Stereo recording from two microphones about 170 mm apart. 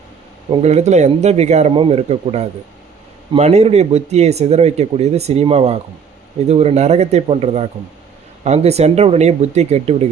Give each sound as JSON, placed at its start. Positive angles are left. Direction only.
{"t": 0.6, "sound": "speech", "side_deg": -40}